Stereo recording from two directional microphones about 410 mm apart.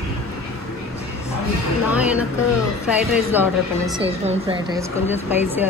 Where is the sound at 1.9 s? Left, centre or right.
Centre.